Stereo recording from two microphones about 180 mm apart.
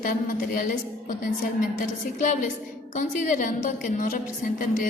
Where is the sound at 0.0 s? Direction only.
50° left (ahead or behind).